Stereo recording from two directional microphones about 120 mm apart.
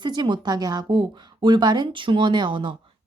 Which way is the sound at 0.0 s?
40° right (ahead or behind).